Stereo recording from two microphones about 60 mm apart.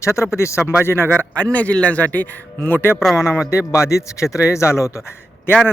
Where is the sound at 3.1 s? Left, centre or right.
Left.